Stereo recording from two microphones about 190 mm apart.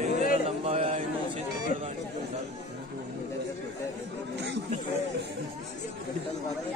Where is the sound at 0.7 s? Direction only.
35° right (ahead or behind).